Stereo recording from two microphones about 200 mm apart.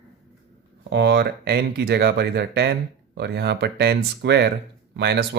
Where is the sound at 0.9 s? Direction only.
55° right (ahead or behind).